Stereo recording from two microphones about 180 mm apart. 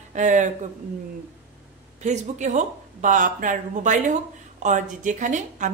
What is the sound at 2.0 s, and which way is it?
Speech, 40° right (ahead or behind).